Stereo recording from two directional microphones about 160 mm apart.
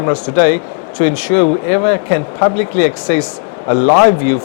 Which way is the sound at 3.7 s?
25° left (ahead or behind).